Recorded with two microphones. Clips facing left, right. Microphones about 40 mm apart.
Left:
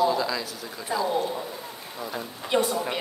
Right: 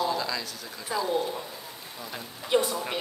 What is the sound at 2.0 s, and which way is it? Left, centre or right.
Speech, centre.